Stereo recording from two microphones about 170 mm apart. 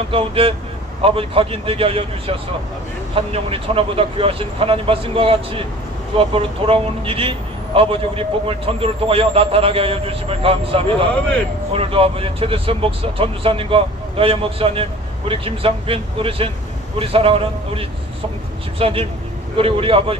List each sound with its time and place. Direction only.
0.1 s a man's voice: 35° right (ahead or behind)